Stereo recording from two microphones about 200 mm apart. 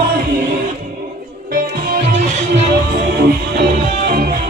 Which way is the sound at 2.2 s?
35° right (ahead or behind).